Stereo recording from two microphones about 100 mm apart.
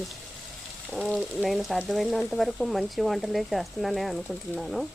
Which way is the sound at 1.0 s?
Centre (ahead or behind).